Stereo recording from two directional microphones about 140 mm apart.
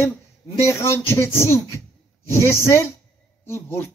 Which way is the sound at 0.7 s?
20° left (ahead or behind).